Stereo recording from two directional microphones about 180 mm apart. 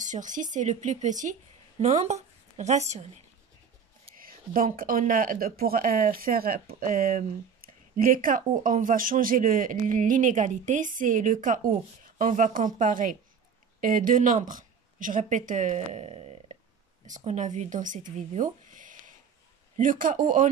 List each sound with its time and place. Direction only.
0.0 s speech: 45° right (ahead or behind)
4.2 s a sound: 55° right (ahead or behind)
4.7 s speech: 50° right (ahead or behind)